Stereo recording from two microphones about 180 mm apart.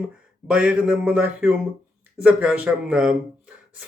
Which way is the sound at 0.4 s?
5° right (ahead or behind).